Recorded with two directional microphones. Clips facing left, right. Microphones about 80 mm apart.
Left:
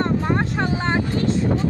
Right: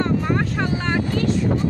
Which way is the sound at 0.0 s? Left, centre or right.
Left.